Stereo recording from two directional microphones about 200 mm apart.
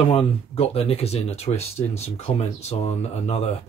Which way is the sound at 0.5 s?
30° left (ahead or behind).